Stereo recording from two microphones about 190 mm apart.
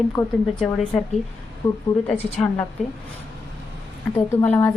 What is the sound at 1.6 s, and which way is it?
A woman's voice, 15° left (ahead or behind).